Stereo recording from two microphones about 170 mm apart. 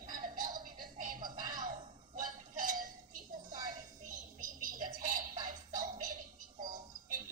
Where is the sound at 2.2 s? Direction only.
50° right (ahead or behind).